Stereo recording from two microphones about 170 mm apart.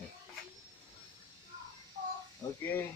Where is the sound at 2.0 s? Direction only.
50° right (ahead or behind).